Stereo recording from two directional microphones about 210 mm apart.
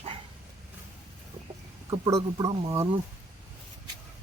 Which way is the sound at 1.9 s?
15° right (ahead or behind).